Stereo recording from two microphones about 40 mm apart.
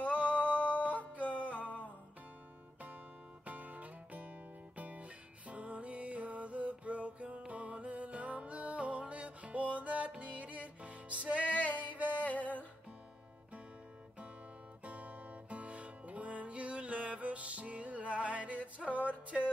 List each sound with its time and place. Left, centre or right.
0.0 s music: left
3.4 s music: right
11.4 s music: left
14.9 s music: right